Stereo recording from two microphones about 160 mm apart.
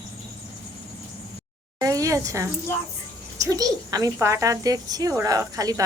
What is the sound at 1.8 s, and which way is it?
Speech, 20° right (ahead or behind).